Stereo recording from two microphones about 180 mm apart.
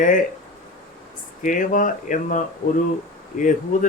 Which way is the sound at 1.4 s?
50° left (ahead or behind).